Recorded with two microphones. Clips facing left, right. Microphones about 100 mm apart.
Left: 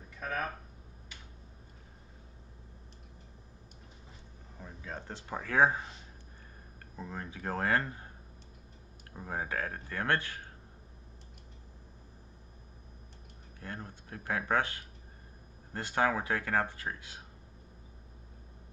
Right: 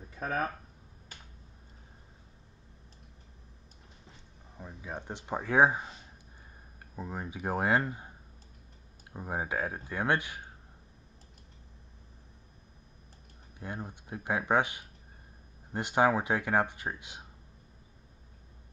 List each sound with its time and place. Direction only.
0.2 s speech: 30° right (ahead or behind)
4.6 s speech: 15° right (ahead or behind)
7.0 s speech: 15° right (ahead or behind)
9.1 s speech: 15° right (ahead or behind)
13.6 s speech: 15° right (ahead or behind)